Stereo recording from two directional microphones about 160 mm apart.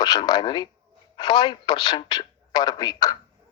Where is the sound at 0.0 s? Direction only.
25° left (ahead or behind).